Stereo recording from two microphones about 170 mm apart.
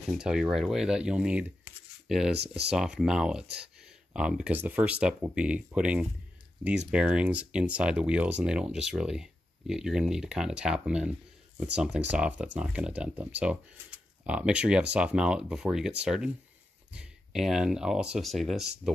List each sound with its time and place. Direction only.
0.2 s speech: 5° right (ahead or behind)
2.3 s speech: 75° right (ahead or behind)
2.7 s speech: 5° right (ahead or behind)